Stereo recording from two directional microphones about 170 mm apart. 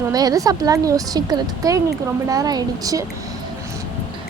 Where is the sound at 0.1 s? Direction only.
20° right (ahead or behind).